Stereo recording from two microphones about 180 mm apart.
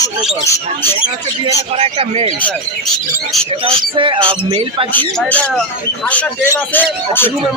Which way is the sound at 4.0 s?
30° right (ahead or behind).